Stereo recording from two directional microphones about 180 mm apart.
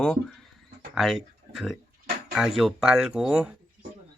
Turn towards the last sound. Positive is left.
turn(degrees=-5)  # may be behind; listen again after turning